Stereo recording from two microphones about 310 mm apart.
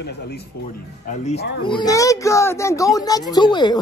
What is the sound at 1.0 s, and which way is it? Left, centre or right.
Speech, left.